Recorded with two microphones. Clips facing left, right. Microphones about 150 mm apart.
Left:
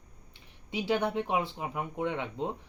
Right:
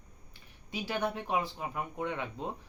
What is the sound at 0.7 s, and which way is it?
A man's voice, 20° left (ahead or behind).